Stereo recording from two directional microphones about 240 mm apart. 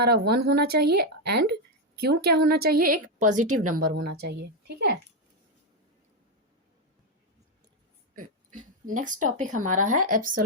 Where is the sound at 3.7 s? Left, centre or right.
Right.